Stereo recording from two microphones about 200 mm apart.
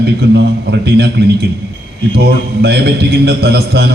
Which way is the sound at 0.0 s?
55° right (ahead or behind).